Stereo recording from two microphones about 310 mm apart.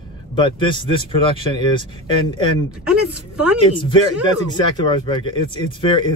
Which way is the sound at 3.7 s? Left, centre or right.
Centre.